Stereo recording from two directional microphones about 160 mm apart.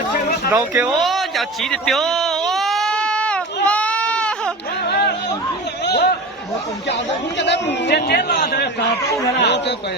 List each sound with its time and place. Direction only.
0.7 s a sound: 5° right (ahead or behind)
4.9 s chatter: 90° left
6.8 s a man's voice: 90° left; by 8.7 s 70° left (ahead or behind)
9.4 s a man's voice: 90° left